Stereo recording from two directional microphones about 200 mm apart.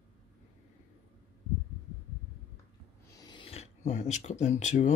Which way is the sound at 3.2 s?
25° left (ahead or behind).